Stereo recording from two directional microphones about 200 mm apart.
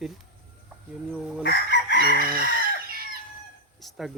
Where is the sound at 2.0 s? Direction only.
45° right (ahead or behind).